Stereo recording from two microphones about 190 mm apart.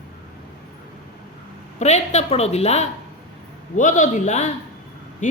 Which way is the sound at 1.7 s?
35° left (ahead or behind).